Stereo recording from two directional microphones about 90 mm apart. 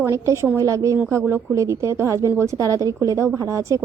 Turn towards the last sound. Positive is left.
turn(degrees=-35)  # may be behind; listen again after turning